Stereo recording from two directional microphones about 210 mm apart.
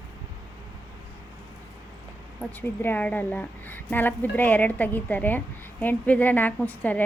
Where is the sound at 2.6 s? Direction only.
10° left (ahead or behind).